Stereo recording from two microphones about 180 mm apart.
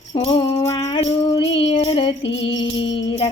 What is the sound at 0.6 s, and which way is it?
Music, 25° left (ahead or behind).